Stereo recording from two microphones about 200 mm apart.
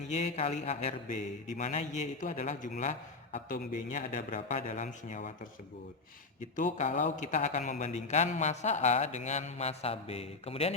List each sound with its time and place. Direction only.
0.1 s a man's voice: 35° left (ahead or behind)
6.6 s a man's voice: 35° left (ahead or behind)